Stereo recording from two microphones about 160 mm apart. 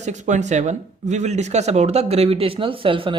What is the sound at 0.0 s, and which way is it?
Speech, 50° right (ahead or behind).